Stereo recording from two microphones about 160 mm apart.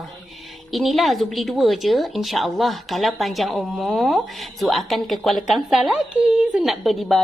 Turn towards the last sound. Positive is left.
turn(degrees=0)  # may be behind; listen again after turning